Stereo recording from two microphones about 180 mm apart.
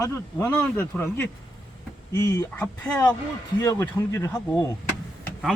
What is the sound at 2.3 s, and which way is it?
Speech, 10° left (ahead or behind).